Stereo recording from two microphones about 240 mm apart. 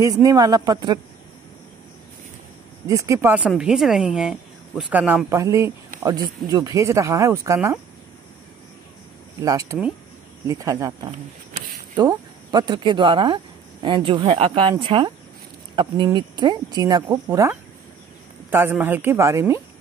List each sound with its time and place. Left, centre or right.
0.0 s speech: centre
2.9 s speech: centre
9.4 s speech: centre